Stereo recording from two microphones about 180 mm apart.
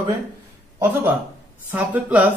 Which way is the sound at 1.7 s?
10° right (ahead or behind).